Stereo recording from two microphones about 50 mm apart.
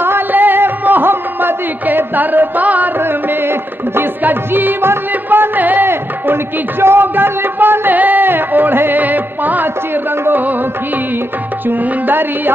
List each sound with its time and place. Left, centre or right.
0.0 s a sound: right
3.0 s music: right
4.2 s speech: right
5.9 s speech: right